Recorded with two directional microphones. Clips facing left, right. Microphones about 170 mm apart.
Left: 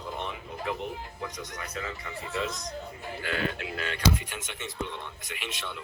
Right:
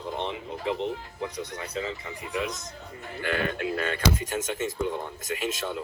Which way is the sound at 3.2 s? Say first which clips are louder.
Right 4 dB; 55° right (ahead or behind).